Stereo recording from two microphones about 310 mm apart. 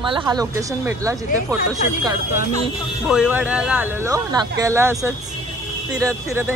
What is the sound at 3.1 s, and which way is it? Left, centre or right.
Speech, centre.